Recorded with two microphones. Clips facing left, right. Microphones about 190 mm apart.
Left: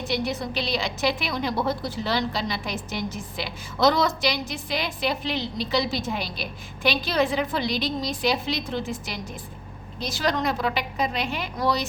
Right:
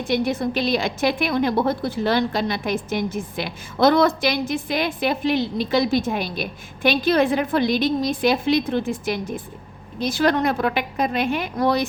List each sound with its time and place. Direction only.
0.0 s a woman's voice: 50° right (ahead or behind)